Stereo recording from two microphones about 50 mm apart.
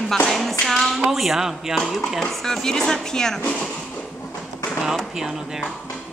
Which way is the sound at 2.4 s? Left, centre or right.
Centre.